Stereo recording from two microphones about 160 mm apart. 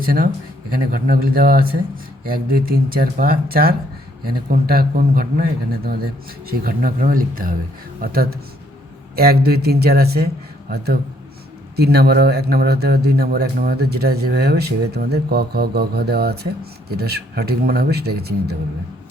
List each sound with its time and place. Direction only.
0.0 s speech: 65° right (ahead or behind)